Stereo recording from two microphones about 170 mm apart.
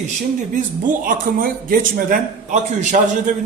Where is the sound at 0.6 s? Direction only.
50° right (ahead or behind).